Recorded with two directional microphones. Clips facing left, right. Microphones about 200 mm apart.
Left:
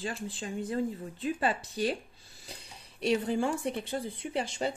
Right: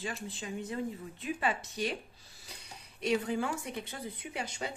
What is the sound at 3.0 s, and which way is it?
Speech, 30° left (ahead or behind).